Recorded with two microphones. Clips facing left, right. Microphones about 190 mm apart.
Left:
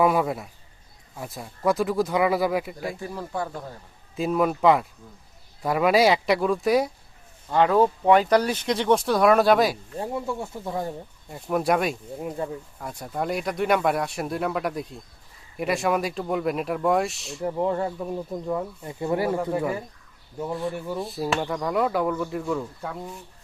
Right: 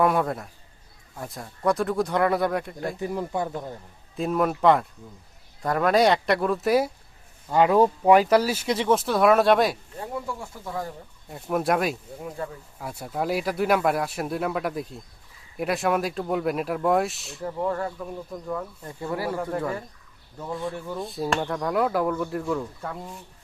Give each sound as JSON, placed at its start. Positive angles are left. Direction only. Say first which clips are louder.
{"t": 0.0, "sound": "speech", "louder": "left 1 dB", "side_deg": 0}
{"t": 3.0, "sound": "speech", "louder": "right 3 dB", "side_deg": -20}
{"t": 4.2, "sound": "speech", "louder": "left 1 dB", "side_deg": 0}
{"t": 10.0, "sound": "speech", "louder": "left 5 dB", "side_deg": 25}
{"t": 11.3, "sound": "speech", "louder": "left 1 dB", "side_deg": 0}
{"t": 12.4, "sound": "speech", "louder": "left 3 dB", "side_deg": 20}
{"t": 12.8, "sound": "speech", "louder": "right 1 dB", "side_deg": -5}
{"t": 17.4, "sound": "speech", "louder": "left 3 dB", "side_deg": 20}
{"t": 19.5, "sound": "speech", "louder": "left 2 dB", "side_deg": 10}